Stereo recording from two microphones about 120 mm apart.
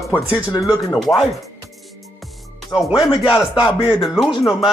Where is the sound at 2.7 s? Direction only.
25° left (ahead or behind).